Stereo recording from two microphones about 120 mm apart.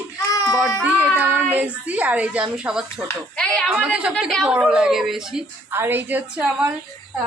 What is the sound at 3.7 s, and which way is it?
Speech, 10° right (ahead or behind).